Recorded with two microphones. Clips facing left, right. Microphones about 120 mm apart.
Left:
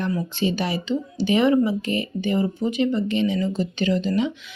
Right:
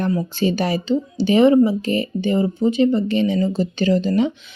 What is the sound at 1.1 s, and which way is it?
Speech, 30° right (ahead or behind).